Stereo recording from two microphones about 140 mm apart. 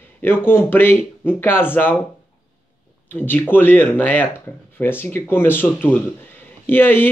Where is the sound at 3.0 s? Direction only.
15° left (ahead or behind).